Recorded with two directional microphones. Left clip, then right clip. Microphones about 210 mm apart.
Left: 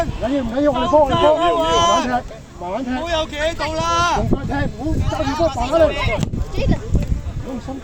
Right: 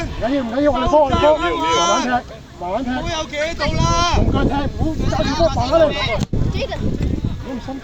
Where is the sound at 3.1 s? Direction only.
50° left (ahead or behind).